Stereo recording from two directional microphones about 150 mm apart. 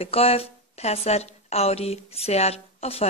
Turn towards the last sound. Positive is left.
turn(degrees=45)  # may be behind; listen again after turning